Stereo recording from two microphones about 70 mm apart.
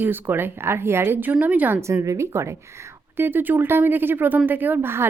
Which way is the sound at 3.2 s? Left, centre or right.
Right.